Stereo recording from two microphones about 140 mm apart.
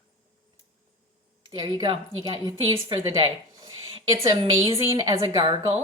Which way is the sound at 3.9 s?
40° right (ahead or behind).